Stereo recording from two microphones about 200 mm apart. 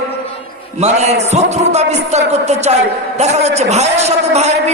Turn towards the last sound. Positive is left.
turn(degrees=-35)  # may be behind; listen again after turning